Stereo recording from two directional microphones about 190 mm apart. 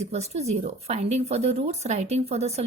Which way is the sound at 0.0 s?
35° right (ahead or behind).